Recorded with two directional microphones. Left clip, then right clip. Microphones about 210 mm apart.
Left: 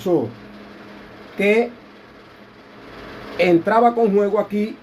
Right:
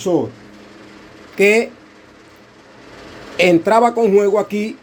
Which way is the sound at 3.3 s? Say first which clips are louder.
Right 3 dB; 40° right (ahead or behind).